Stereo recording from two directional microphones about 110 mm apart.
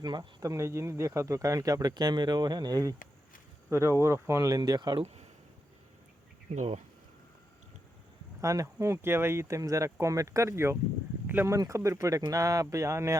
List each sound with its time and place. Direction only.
0.0 s speech: 40° right (ahead or behind)
4.9 s speech: 75° right (ahead or behind)
6.5 s speech: 90° right
8.4 s speech: 30° right (ahead or behind)
11.5 s speech: 30° right (ahead or behind)